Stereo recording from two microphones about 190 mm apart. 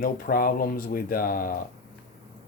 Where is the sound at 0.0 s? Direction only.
50° left (ahead or behind).